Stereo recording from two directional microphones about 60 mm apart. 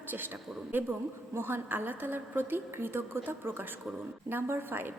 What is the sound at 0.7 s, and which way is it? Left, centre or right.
A woman's voice, right.